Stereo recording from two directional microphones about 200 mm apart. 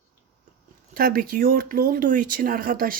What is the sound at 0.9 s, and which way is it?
Speech, 45° right (ahead or behind).